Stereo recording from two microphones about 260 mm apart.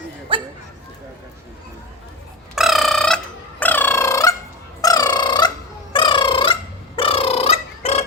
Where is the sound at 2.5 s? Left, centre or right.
Centre.